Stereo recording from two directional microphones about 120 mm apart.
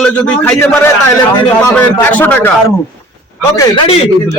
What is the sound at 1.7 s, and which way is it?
Speech, 10° left (ahead or behind).